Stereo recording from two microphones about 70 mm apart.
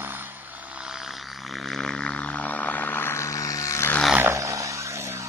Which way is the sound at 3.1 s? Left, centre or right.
Left.